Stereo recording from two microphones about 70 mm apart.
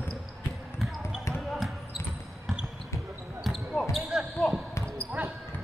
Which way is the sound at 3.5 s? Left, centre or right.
Centre.